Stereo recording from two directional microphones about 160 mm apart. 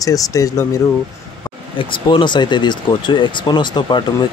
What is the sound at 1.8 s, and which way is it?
Speech, 30° left (ahead or behind).